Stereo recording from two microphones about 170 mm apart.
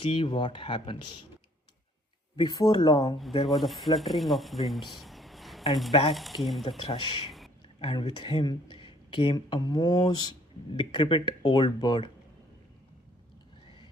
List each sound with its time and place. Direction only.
0.0 s speech: 30° left (ahead or behind)
2.3 s speech: 25° left (ahead or behind)
3.4 s speech: centre (ahead or behind)
5.9 s speech: 35° left (ahead or behind)
6.1 s speech: centre (ahead or behind)
6.8 s speech: 30° left (ahead or behind)
7.3 s a sound: centre (ahead or behind)
7.8 s speech: 25° left (ahead or behind)